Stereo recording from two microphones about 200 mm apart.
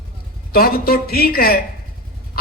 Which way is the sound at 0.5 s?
50° left (ahead or behind).